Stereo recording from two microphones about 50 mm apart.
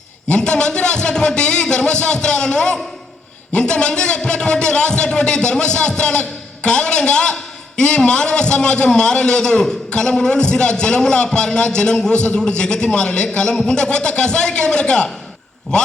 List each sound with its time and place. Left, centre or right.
0.3 s a man's voice: centre